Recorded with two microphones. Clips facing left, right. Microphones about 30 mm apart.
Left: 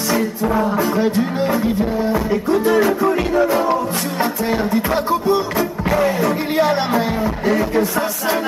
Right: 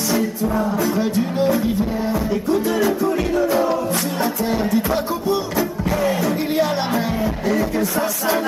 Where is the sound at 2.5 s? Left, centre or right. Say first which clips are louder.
Left 4 dB; centre.